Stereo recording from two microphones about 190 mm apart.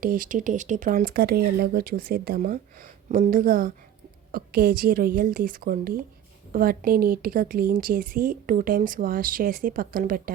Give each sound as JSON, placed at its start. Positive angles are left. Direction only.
{"t": 0.0, "sound": "a woman's voice", "side_deg": -45}